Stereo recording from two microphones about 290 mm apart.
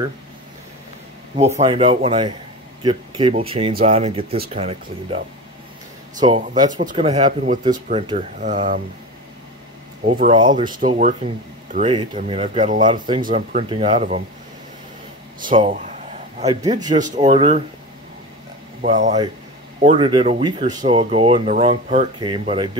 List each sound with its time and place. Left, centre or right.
1.6 s a man's voice: centre
6.8 s speech: right
10.0 s a man's voice: right
13.2 s speech: right
15.5 s a sound: right
16.4 s a man's voice: centre
18.8 s speech: right